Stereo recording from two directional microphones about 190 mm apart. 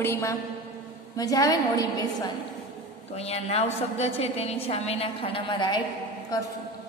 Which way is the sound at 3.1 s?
35° left (ahead or behind).